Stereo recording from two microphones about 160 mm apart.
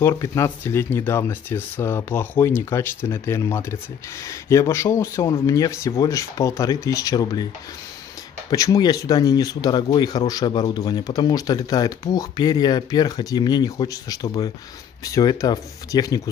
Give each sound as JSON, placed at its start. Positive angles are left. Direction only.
{"t": 0.0, "sound": "speech", "side_deg": 20}
{"t": 8.5, "sound": "speech", "side_deg": 20}